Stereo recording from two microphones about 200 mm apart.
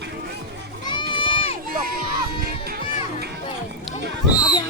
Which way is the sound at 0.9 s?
25° left (ahead or behind).